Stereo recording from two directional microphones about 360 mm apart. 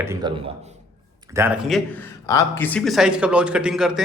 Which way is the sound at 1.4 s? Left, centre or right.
Centre.